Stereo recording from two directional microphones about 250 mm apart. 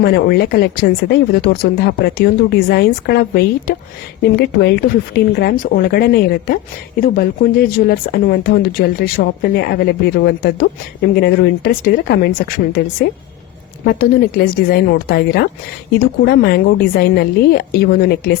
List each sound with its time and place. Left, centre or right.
0.0 s speech: left
13.8 s speech: left